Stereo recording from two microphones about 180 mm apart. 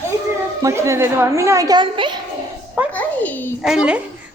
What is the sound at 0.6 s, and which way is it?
A woman's voice, 15° right (ahead or behind).